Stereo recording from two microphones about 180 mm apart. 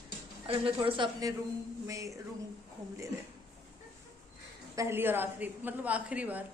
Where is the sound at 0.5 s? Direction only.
30° right (ahead or behind).